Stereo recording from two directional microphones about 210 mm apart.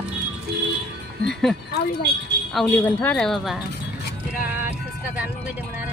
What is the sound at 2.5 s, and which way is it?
Speech, 10° left (ahead or behind).